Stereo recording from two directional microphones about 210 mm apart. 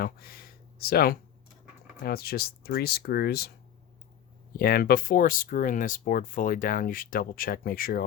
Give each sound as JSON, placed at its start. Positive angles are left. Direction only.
{"t": 0.0, "sound": "speech", "side_deg": 45}
{"t": 4.5, "sound": "speech", "side_deg": 45}